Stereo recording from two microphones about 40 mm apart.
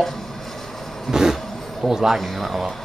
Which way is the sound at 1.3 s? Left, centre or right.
Centre.